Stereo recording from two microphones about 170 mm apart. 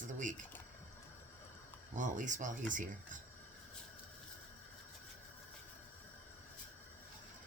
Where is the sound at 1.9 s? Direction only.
45° right (ahead or behind).